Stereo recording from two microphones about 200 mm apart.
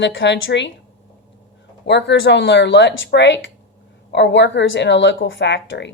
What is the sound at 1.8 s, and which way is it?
A woman's voice, 60° left (ahead or behind).